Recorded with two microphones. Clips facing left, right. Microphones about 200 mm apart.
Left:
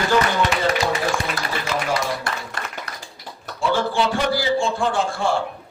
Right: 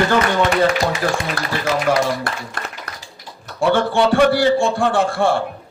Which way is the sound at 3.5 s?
60° right (ahead or behind).